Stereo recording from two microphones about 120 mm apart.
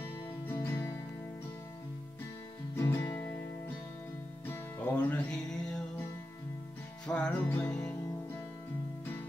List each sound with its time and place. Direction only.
0.5 s music: 15° left (ahead or behind)
2.7 s music: 15° left (ahead or behind)
4.5 s music: 15° left (ahead or behind)
7.1 s music: 10° left (ahead or behind)